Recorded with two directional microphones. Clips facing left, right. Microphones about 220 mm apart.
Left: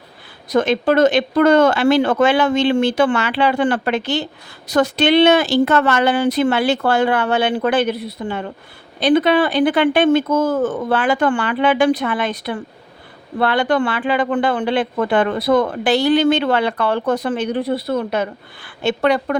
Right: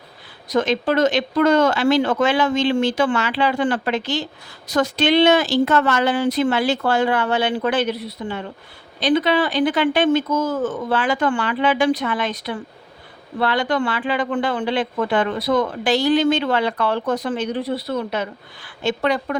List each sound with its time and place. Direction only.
0.4 s speech: 55° left (ahead or behind)